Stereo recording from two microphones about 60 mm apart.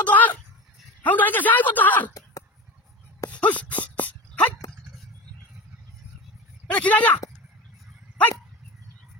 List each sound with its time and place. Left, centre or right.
0.0 s a sound: left
1.0 s a man's voice: left
3.3 s wail: left
6.7 s speech: left